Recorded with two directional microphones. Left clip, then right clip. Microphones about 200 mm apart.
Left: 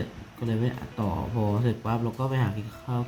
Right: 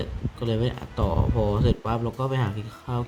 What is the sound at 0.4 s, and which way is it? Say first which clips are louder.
Speech: right 3 dB; 15° right (ahead or behind).